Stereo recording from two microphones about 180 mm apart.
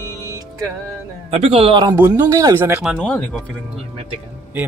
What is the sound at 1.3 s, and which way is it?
Speech, 30° right (ahead or behind).